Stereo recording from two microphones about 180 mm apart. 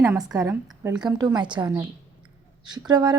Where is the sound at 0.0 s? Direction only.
10° right (ahead or behind).